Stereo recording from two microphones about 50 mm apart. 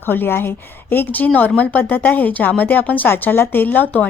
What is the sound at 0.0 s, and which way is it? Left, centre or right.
A woman's voice, left.